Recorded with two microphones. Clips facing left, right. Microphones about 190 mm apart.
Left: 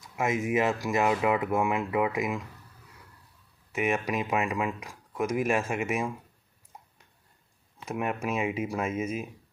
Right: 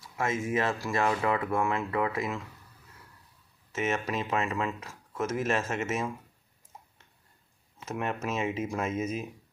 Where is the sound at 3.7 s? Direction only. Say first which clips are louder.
Left 2 dB; 15° left (ahead or behind).